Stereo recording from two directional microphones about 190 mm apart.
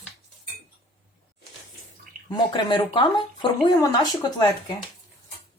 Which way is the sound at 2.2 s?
25° left (ahead or behind).